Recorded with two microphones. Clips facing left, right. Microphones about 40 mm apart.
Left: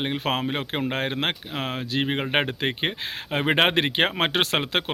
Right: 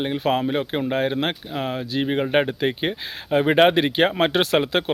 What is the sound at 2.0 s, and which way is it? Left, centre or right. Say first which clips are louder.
Speech: right 4 dB; left.